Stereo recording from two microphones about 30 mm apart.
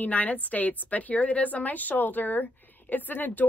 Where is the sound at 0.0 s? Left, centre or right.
Left.